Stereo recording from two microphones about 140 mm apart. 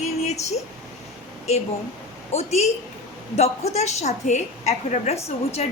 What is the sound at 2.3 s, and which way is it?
A woman's voice, 50° left (ahead or behind).